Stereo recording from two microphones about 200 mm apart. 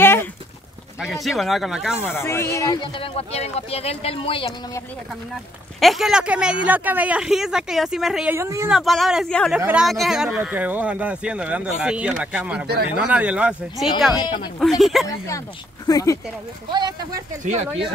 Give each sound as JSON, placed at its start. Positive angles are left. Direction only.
{"t": 0.0, "sound": "a sound", "side_deg": 10}
{"t": 1.0, "sound": "speech", "side_deg": 0}
{"t": 2.0, "sound": "speech", "side_deg": 10}
{"t": 5.8, "sound": "speech", "side_deg": 0}
{"t": 8.4, "sound": "speech", "side_deg": -15}
{"t": 8.6, "sound": "speech", "side_deg": 0}
{"t": 15.0, "sound": "speech", "side_deg": 15}
{"t": 17.1, "sound": "speech", "side_deg": -35}